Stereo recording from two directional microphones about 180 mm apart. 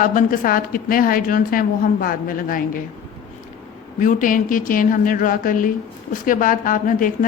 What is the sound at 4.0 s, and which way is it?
A woman's voice, 45° left (ahead or behind).